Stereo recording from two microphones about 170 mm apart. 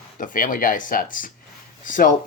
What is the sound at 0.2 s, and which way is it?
Speech, 50° left (ahead or behind).